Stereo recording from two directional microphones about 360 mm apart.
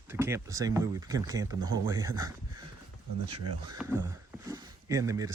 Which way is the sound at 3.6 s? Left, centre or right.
Centre.